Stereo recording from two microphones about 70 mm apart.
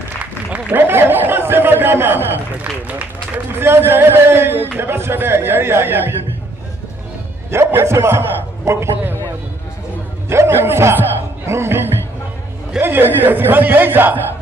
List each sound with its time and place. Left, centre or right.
0.2 s a man's voice: right
3.5 s a man's voice: right
7.8 s a man's voice: right
10.3 s a man's voice: right